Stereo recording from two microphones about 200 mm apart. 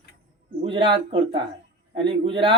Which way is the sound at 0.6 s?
25° right (ahead or behind).